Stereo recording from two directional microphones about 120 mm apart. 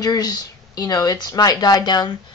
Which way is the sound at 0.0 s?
35° left (ahead or behind).